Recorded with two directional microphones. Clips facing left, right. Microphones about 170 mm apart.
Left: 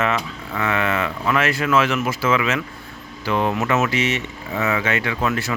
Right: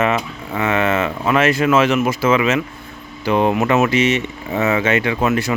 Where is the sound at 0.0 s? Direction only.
20° right (ahead or behind).